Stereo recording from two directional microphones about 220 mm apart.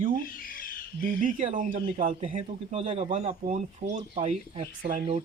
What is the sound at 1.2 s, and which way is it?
A man's voice, 35° right (ahead or behind).